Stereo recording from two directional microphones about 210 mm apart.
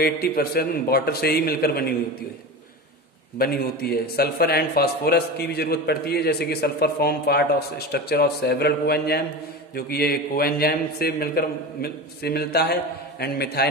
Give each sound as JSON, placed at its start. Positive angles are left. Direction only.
{"t": 0.0, "sound": "a man's voice", "side_deg": 50}
{"t": 3.3, "sound": "a man's voice", "side_deg": 45}